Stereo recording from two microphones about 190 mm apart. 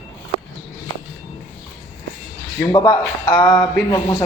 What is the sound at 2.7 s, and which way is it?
A man's voice, 15° left (ahead or behind).